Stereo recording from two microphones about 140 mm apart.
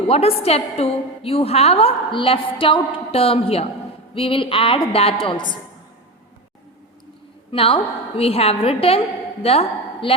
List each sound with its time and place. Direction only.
0.1 s a woman's voice: 45° left (ahead or behind)
7.5 s a woman's voice: 40° left (ahead or behind)